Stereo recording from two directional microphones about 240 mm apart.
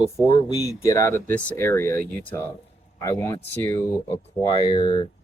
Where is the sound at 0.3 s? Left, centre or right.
Centre.